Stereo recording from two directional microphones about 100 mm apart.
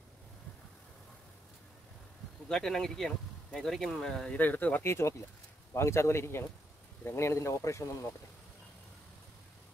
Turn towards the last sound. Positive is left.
turn(degrees=30)  # may be behind; listen again after turning